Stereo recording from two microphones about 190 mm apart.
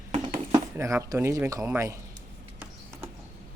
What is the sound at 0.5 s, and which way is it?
Speech, 15° right (ahead or behind).